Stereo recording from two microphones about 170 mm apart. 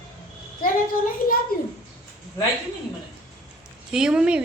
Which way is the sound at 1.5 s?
60° left (ahead or behind).